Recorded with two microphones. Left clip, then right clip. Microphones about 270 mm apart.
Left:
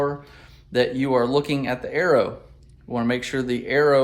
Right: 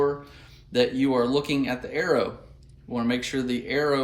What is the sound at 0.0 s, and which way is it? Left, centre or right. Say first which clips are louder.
Speech: even; centre.